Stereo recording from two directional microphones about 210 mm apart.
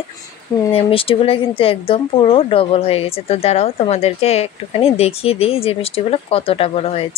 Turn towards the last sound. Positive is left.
turn(degrees=25)  # may be behind; listen again after turning